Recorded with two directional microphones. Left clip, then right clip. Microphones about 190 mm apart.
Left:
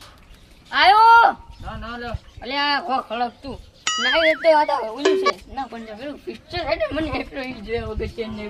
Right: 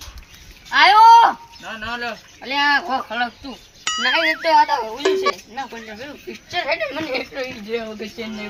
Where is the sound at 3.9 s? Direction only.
Centre (ahead or behind).